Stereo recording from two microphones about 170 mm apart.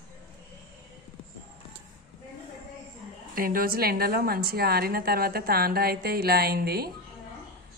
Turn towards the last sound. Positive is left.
turn(degrees=-65)  # may be behind; listen again after turning